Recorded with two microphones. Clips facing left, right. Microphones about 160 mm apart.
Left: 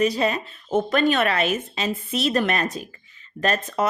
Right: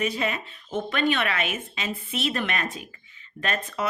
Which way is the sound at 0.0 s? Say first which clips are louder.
Left 6 dB; 35° left (ahead or behind).